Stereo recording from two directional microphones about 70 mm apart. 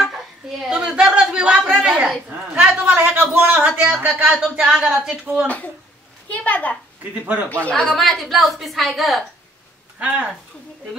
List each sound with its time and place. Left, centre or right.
0.0 s a sound: centre
0.7 s a sound: centre
4.6 s a woman's voice: centre
6.3 s a child's voice: left
7.2 s a man's voice: right
7.7 s a woman's voice: centre
9.9 s a woman's voice: centre